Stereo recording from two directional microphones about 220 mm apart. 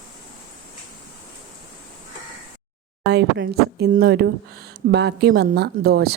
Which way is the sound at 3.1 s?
50° right (ahead or behind).